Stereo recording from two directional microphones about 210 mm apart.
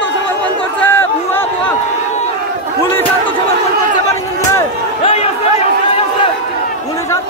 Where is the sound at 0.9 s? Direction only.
10° left (ahead or behind).